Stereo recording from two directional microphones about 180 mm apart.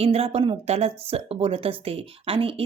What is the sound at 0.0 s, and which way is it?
Speech, 35° right (ahead or behind).